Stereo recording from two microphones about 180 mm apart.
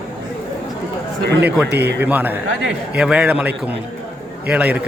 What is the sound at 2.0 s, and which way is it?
A man's voice, 10° right (ahead or behind).